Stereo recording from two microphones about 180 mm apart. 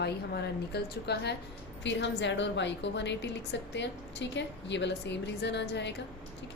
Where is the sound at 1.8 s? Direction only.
85° left.